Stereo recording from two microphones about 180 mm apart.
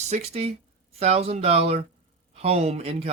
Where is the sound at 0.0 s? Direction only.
35° right (ahead or behind).